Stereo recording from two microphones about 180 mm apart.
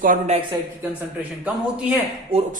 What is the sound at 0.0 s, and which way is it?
Speech, 50° right (ahead or behind).